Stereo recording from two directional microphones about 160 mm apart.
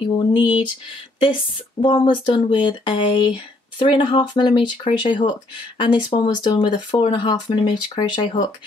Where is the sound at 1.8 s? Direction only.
30° left (ahead or behind).